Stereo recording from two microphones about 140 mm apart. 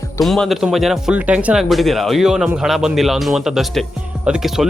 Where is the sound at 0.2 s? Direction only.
Centre (ahead or behind).